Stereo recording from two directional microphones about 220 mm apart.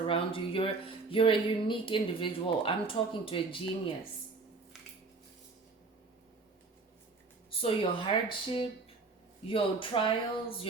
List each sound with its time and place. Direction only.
0.1 s a woman's voice: 25° left (ahead or behind)
7.6 s a woman's voice: 25° left (ahead or behind)